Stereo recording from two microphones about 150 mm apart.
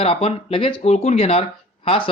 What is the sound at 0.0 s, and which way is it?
Speech, 40° left (ahead or behind).